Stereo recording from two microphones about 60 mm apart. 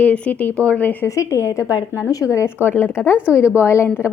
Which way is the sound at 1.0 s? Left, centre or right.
Left.